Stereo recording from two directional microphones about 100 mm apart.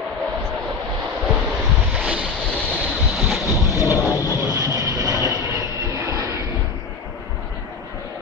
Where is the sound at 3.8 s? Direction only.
35° left (ahead or behind).